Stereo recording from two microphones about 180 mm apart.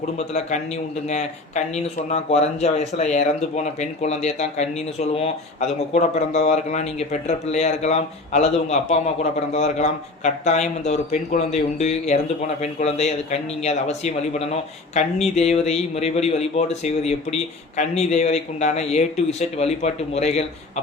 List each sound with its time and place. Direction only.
1.0 s speech: 40° left (ahead or behind)